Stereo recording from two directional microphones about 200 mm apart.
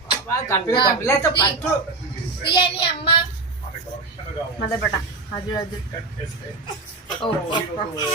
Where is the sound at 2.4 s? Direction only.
25° left (ahead or behind).